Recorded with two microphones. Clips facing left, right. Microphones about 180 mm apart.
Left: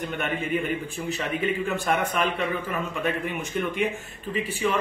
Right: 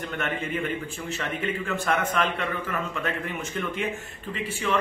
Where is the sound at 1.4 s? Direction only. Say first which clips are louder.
Left 2 dB; 15° left (ahead or behind).